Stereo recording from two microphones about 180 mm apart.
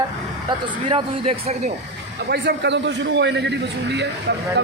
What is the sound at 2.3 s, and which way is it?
A man's voice, 70° right (ahead or behind).